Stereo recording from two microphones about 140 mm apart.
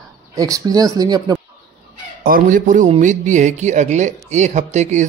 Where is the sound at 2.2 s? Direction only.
80° right.